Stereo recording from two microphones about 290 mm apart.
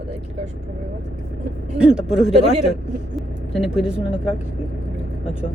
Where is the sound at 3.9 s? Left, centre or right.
Centre.